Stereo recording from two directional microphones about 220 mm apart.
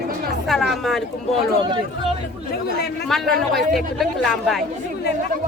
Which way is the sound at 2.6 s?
45° left (ahead or behind).